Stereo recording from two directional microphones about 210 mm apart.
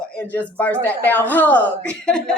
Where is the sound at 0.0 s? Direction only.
5° left (ahead or behind).